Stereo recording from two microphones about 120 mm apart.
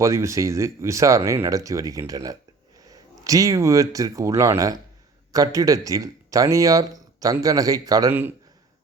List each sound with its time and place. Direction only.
0.0 s speech: 25° right (ahead or behind)